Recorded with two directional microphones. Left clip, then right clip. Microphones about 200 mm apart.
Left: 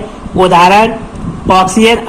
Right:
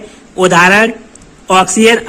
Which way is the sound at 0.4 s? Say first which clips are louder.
Left 2 dB; 40° right (ahead or behind).